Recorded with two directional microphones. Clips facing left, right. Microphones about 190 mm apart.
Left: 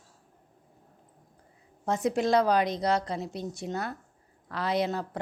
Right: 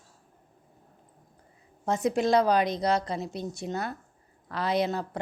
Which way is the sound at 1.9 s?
20° right (ahead or behind).